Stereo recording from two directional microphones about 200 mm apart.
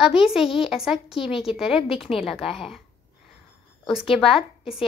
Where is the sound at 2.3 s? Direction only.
30° left (ahead or behind).